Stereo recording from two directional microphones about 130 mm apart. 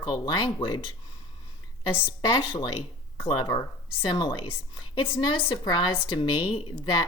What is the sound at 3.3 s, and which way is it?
Speech, 30° left (ahead or behind).